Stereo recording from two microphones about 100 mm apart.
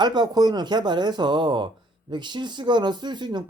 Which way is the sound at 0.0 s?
45° right (ahead or behind).